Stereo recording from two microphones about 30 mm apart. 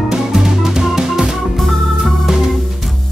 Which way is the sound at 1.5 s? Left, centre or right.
Centre.